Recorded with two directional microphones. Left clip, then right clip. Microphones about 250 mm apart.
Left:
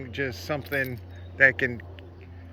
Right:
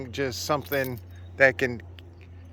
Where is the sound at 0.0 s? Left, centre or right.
Centre.